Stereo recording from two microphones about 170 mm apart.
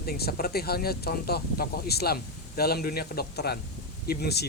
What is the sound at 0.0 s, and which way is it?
Speech, 65° left (ahead or behind).